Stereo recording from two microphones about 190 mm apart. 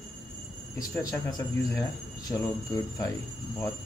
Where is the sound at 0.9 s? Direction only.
10° left (ahead or behind).